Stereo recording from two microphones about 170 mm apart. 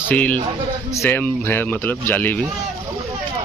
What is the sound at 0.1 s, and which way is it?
Speech, 10° left (ahead or behind).